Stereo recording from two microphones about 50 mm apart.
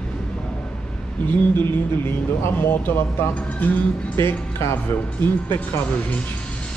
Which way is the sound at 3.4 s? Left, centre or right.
Left.